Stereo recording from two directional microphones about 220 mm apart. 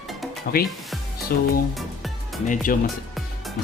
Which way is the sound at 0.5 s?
45° left (ahead or behind).